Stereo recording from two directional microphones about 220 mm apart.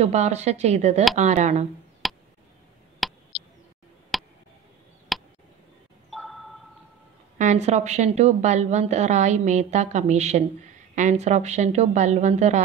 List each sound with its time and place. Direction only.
0.0 s a woman's voice: 30° right (ahead or behind)
2.0 s a sound: centre (ahead or behind)
7.3 s a woman's voice: 30° right (ahead or behind)